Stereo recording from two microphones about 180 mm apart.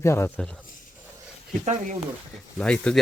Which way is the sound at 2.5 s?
5° left (ahead or behind).